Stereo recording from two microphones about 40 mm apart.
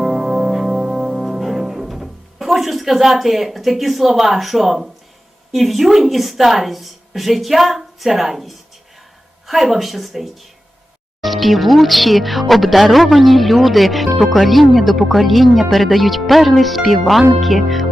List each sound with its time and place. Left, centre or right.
0.0 s music: centre
5.5 s speech: centre